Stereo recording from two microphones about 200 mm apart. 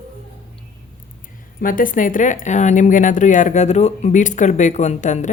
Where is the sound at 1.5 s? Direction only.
45° left (ahead or behind).